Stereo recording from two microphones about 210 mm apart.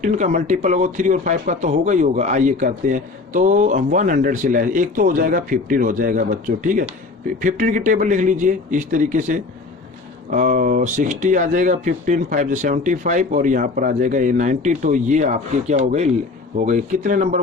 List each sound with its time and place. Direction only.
0.0 s speech: 35° right (ahead or behind)